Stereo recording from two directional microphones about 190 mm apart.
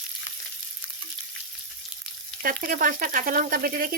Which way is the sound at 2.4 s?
45° right (ahead or behind).